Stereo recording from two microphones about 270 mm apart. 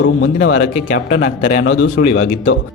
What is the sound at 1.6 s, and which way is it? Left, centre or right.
Speech, left.